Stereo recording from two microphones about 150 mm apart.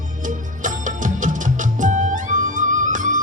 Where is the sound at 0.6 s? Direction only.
60° right (ahead or behind).